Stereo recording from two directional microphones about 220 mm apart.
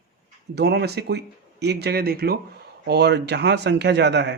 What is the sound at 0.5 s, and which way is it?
Speech, 50° right (ahead or behind).